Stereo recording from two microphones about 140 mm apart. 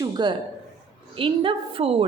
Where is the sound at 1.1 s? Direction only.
40° right (ahead or behind).